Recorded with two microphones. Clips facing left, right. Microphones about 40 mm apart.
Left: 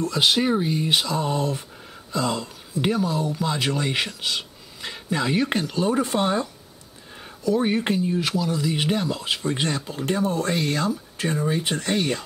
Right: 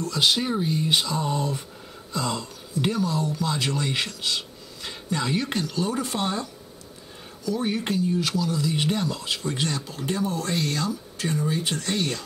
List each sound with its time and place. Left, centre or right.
0.0 s speech: centre